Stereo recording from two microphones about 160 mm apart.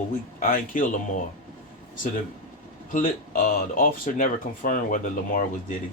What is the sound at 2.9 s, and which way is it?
Speech, 60° left (ahead or behind).